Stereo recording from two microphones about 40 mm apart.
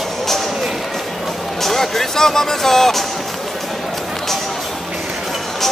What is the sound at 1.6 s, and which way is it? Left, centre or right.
Music, centre.